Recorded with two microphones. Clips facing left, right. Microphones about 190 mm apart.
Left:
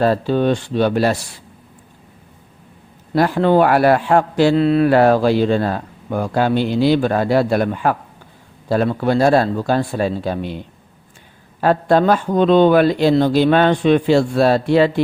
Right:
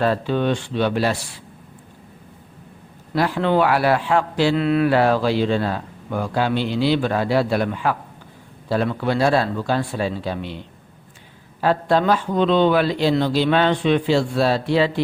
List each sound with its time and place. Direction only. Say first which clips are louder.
0.0 s speech: left 4 dB; 40° left (ahead or behind)
3.2 s speech: left 5 dB; 45° left (ahead or behind)
4.5 s speech: left 3 dB; 35° left (ahead or behind)
4.9 s speech: left 5 dB; 50° left (ahead or behind)
9.0 s speech: left 5 dB; 45° left (ahead or behind)
11.6 s speech: left 4 dB; 50° left (ahead or behind)